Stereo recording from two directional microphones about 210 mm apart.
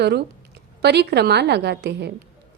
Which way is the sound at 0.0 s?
50° right (ahead or behind).